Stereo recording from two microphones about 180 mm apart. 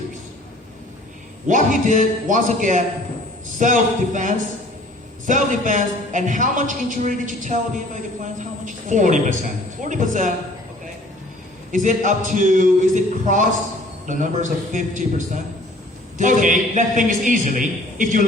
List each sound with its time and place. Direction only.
1.5 s a man's voice: 45° right (ahead or behind)
11.7 s a man's voice: 45° right (ahead or behind)